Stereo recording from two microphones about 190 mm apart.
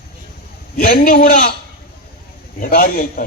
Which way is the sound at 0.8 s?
50° left (ahead or behind).